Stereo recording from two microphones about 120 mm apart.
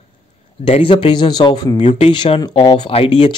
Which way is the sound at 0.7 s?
50° left (ahead or behind).